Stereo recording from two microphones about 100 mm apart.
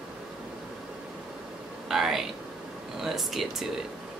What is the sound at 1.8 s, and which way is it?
Speech, 5° right (ahead or behind).